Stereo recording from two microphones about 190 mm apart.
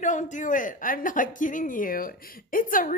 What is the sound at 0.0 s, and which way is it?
Speech, 40° left (ahead or behind).